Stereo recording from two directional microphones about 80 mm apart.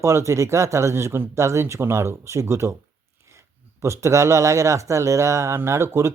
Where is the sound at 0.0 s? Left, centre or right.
Right.